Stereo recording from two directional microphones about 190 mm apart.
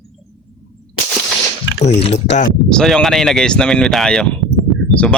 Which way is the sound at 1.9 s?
65° left (ahead or behind).